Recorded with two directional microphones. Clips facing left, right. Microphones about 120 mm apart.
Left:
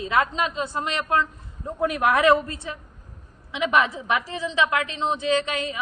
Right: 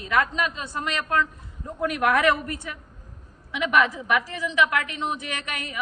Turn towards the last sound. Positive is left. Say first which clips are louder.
# left 10 dB
turn(degrees=25)  # may be behind; listen again after turning